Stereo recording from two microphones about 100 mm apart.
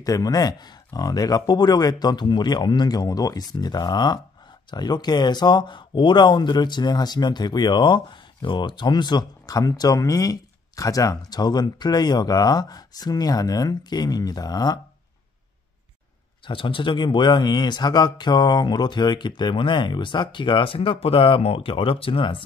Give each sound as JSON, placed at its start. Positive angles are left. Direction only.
{"t": 0.0, "sound": "speech", "side_deg": 40}
{"t": 16.4, "sound": "speech", "side_deg": 55}